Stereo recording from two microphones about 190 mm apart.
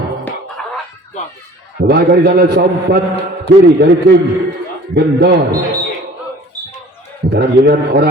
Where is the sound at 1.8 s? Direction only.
55° right (ahead or behind).